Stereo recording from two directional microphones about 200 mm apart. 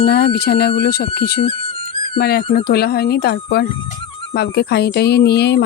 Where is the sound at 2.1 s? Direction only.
50° left (ahead or behind).